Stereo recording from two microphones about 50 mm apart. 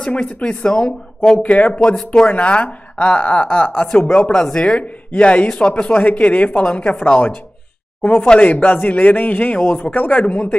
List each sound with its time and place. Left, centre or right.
0.0 s speech: centre
1.4 s speech: left
4.3 s speech: centre